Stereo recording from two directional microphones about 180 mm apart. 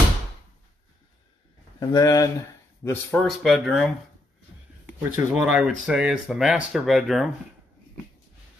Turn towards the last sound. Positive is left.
turn(degrees=0)  # may be behind; listen again after turning